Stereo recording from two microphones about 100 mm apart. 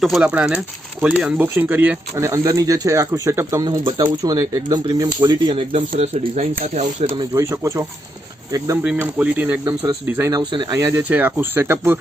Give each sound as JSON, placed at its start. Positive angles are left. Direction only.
{"t": 0.2, "sound": "speech", "side_deg": -10}
{"t": 2.1, "sound": "speech", "side_deg": -30}
{"t": 3.6, "sound": "speech", "side_deg": -45}
{"t": 5.5, "sound": "speech", "side_deg": -80}
{"t": 7.2, "sound": "speech", "side_deg": -35}
{"t": 9.0, "sound": "speech", "side_deg": -15}
{"t": 10.3, "sound": "speech", "side_deg": -50}
{"t": 10.7, "sound": "speech", "side_deg": -35}
{"t": 11.1, "sound": "speech", "side_deg": -20}